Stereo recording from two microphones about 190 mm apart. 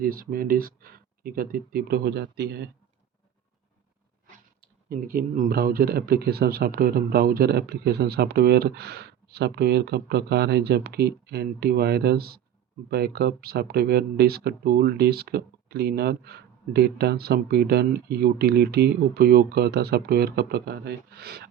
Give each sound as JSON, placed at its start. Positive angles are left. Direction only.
{"t": 0.0, "sound": "speech", "side_deg": -50}
{"t": 4.9, "sound": "speech", "side_deg": -50}